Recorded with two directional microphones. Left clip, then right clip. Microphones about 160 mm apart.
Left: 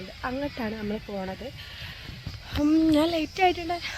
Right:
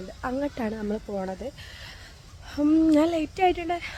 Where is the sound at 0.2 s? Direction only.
10° right (ahead or behind).